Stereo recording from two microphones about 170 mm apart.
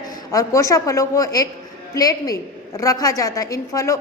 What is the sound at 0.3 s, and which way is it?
A woman's voice, 20° left (ahead or behind).